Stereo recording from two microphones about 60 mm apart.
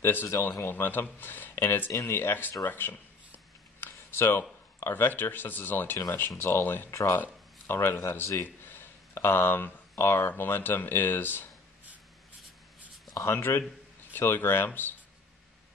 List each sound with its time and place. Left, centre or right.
0.0 s speech: left
6.9 s speech: left
7.6 s speech: left
12.4 s writing: centre
13.1 s speech: left